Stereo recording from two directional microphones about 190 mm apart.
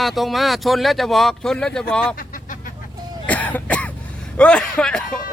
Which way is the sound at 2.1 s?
45° left (ahead or behind).